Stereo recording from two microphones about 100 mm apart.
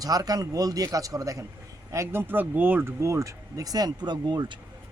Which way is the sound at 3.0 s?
30° right (ahead or behind).